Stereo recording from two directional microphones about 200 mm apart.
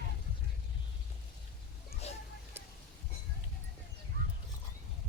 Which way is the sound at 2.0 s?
30° left (ahead or behind).